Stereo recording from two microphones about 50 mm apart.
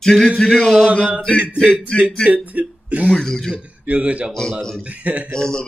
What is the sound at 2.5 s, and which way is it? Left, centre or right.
Speech, right.